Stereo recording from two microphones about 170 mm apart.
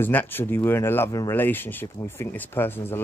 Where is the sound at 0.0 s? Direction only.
10° left (ahead or behind).